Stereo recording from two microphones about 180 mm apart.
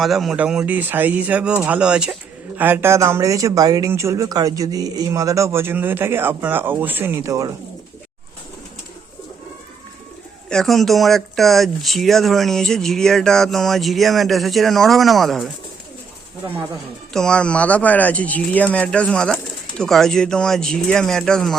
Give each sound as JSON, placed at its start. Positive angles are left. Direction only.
{"t": 0.0, "sound": "speech", "side_deg": 0}
{"t": 10.5, "sound": "speech", "side_deg": 0}
{"t": 17.2, "sound": "speech", "side_deg": 5}